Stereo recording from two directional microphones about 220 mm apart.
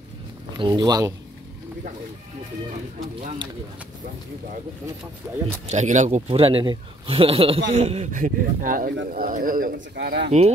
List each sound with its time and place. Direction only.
0.6 s speech: 20° right (ahead or behind)
5.2 s speech: 10° right (ahead or behind)
5.7 s a man's voice: 30° right (ahead or behind)
9.8 s speech: 50° right (ahead or behind)